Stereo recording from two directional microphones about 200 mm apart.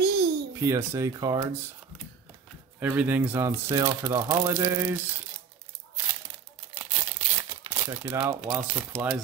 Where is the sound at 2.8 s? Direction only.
10° right (ahead or behind).